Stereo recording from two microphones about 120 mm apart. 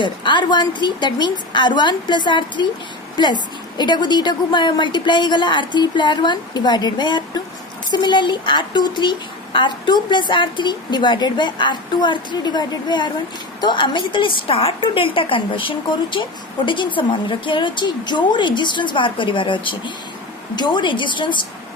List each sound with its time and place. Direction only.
0.0 s a woman's voice: 40° left (ahead or behind)